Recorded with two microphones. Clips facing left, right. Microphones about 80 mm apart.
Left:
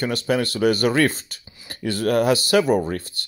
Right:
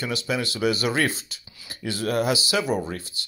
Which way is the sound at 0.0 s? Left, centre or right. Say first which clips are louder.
Left 5 dB; left.